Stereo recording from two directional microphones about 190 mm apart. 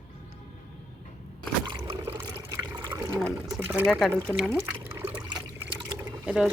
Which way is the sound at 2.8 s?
15° right (ahead or behind).